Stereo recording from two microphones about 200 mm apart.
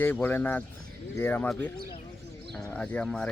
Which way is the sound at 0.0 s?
10° left (ahead or behind).